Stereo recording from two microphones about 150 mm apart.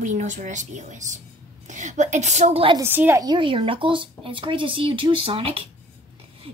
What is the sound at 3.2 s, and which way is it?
A woman's voice, 30° right (ahead or behind).